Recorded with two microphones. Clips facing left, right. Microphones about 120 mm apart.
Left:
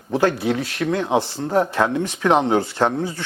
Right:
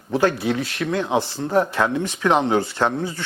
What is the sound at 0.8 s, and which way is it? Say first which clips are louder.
Speech: left 3 dB; 35° left (ahead or behind).